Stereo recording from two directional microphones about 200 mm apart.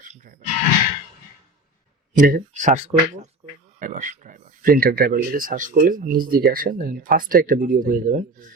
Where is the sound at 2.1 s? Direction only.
45° right (ahead or behind).